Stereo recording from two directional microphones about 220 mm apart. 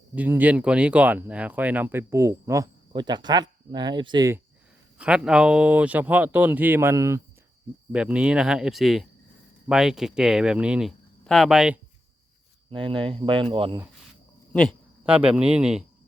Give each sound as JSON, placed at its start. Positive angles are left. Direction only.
{"t": 0.1, "sound": "speech", "side_deg": -5}
{"t": 4.9, "sound": "speech", "side_deg": -5}
{"t": 12.7, "sound": "speech", "side_deg": -20}
{"t": 14.5, "sound": "a man's voice", "side_deg": 5}